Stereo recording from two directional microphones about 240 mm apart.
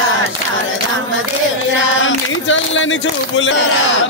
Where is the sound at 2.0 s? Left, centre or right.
Left.